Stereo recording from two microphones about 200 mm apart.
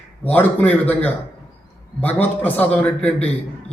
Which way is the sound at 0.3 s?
5° left (ahead or behind).